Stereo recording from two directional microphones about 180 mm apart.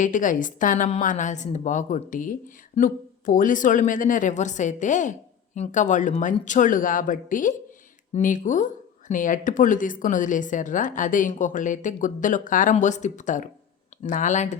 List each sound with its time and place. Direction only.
0.0 s speech: 45° left (ahead or behind)